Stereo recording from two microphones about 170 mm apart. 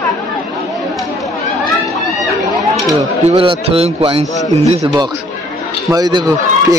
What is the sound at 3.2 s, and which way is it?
Speech, 35° right (ahead or behind).